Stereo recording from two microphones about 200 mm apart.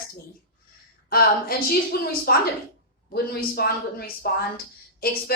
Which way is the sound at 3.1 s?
50° left (ahead or behind).